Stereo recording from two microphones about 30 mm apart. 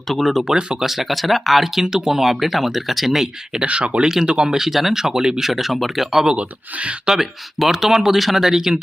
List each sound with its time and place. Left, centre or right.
0.1 s speech: centre
0.8 s speech: centre
3.7 s speech: right
4.3 s speech: right
4.6 s speech: centre
5.0 s speech: right
5.4 s speech: centre
7.1 s speech: centre
8.1 s speech: centre
8.4 s speech: centre